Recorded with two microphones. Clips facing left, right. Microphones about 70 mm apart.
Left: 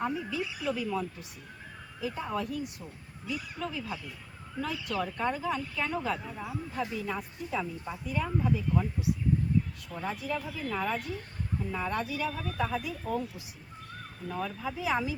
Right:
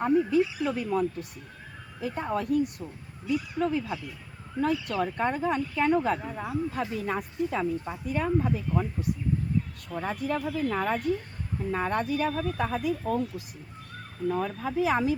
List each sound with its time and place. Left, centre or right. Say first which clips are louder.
0.0 s speech: right 9 dB; right
6.3 s speech: right 5 dB; right
14.3 s speech: right 6 dB; right